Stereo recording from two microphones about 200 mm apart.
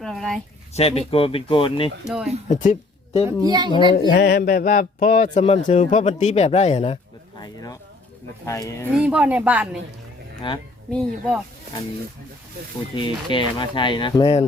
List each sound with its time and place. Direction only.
0.0 s speech: centre (ahead or behind)
0.7 s speech: 30° left (ahead or behind)
2.0 s speech: centre (ahead or behind)
2.5 s speech: 40° left (ahead or behind)
3.2 s a woman's voice: 20° right (ahead or behind)
3.7 s speech: 25° left (ahead or behind)
3.9 s speech: 50° left (ahead or behind); by 7.0 s 30° left (ahead or behind)
7.4 s speech: 20° left (ahead or behind)
9.0 s speech: 5° right (ahead or behind)
10.4 s speech: 25° left (ahead or behind)
13.0 s speech: 25° left (ahead or behind)